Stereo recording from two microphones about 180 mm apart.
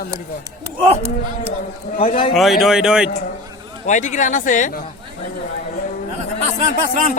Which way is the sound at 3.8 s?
45° left (ahead or behind).